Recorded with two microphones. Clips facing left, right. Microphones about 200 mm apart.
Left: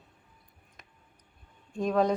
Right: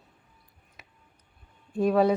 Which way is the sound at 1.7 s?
5° right (ahead or behind).